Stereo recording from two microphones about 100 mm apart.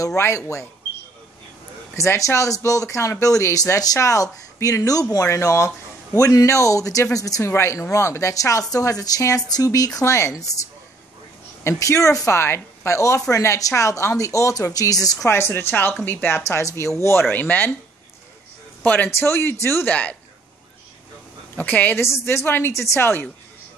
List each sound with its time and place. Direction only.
0.0 s speech: 30° left (ahead or behind)
2.0 s speech: 30° left (ahead or behind)
11.6 s speech: 30° left (ahead or behind)
15.2 s speech: 25° left (ahead or behind)
18.9 s speech: 20° left (ahead or behind)
21.5 s a woman's voice: 15° left (ahead or behind)
22.0 s speech: 25° left (ahead or behind)